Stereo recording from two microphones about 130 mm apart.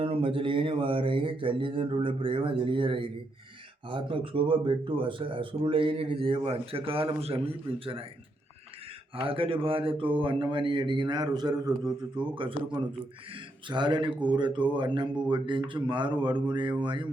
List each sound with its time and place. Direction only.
0.0 s speech: 40° right (ahead or behind)
9.1 s speech: 45° right (ahead or behind)